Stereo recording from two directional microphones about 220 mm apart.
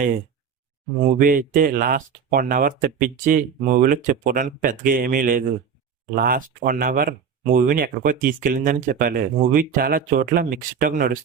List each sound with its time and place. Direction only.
1.2 s speech: 40° right (ahead or behind)